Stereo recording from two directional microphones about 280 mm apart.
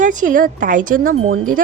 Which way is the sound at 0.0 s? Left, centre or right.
Right.